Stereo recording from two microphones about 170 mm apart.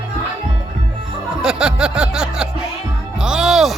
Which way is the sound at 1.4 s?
5° right (ahead or behind).